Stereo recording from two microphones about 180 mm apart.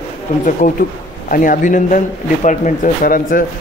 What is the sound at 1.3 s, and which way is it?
Speech, 50° left (ahead or behind).